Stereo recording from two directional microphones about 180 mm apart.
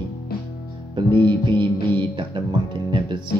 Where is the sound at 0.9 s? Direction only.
25° right (ahead or behind).